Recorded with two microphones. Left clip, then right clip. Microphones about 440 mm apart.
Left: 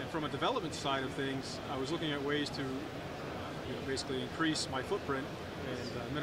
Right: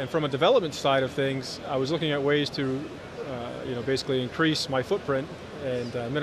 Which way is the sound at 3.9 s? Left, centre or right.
Right.